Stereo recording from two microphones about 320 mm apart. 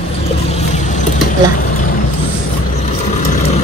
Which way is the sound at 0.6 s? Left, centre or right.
Left.